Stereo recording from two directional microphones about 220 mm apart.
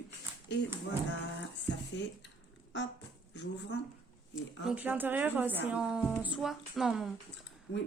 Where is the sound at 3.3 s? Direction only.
50° left (ahead or behind).